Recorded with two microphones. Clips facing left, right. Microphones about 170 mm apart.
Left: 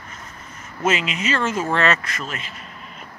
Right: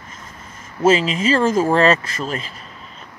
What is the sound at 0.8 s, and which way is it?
Speech, 30° right (ahead or behind).